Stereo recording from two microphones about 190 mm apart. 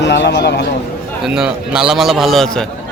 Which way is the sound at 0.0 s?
65° left (ahead or behind).